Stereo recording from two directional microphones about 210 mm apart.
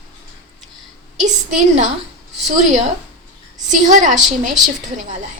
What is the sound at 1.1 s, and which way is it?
A woman's voice, 35° right (ahead or behind).